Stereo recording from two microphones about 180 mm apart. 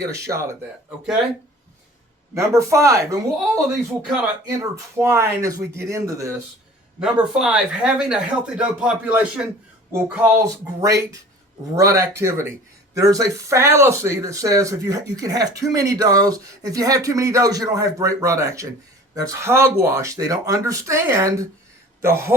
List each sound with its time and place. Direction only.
0.0 s speech: 15° right (ahead or behind)
2.3 s speech: 15° right (ahead or behind)
7.0 s speech: 5° right (ahead or behind)